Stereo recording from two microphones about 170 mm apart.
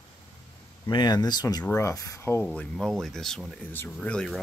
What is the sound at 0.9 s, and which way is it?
Speech, 25° left (ahead or behind).